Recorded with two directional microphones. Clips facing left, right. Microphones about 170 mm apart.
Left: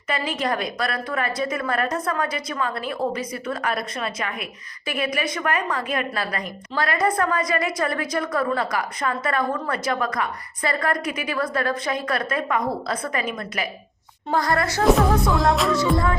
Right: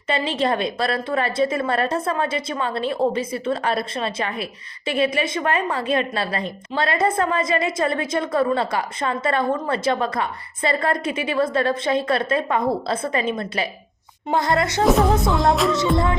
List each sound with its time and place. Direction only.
0.1 s a woman's voice: 30° right (ahead or behind)
15.3 s music: centre (ahead or behind)